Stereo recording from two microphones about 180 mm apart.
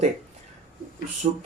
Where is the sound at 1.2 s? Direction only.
50° right (ahead or behind).